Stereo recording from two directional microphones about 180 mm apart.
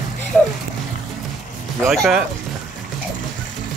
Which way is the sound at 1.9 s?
Centre (ahead or behind).